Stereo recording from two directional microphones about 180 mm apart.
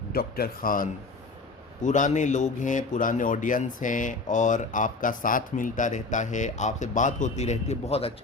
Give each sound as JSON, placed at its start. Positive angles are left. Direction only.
{"t": 0.1, "sound": "speech", "side_deg": 55}